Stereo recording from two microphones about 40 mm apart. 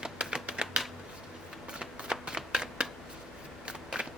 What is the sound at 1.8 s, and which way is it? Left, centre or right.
Shuffling cards, right.